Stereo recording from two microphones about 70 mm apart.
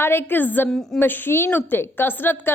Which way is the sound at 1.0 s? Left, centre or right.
Left.